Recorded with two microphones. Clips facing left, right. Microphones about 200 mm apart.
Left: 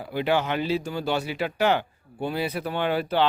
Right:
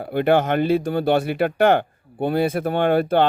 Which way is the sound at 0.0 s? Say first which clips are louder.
Right 6 dB; 55° right (ahead or behind).